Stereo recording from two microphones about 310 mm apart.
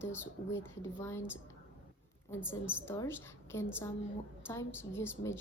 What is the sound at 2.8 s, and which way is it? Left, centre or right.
A woman's voice, centre.